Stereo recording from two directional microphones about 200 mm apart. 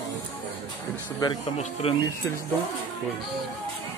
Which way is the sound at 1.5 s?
30° left (ahead or behind).